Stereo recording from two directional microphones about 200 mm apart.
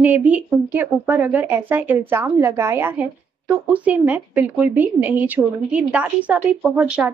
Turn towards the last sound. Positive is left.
turn(degrees=-5)  # may be behind; listen again after turning